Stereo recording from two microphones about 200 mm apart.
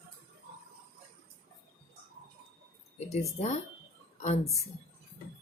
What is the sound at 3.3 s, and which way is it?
Speech, 35° left (ahead or behind).